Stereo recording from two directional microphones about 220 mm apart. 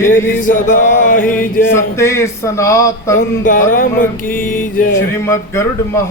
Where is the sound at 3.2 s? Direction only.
35° left (ahead or behind).